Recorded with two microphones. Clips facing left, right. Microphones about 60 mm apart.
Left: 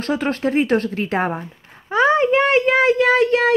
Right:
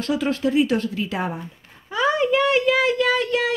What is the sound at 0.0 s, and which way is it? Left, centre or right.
Speech, left.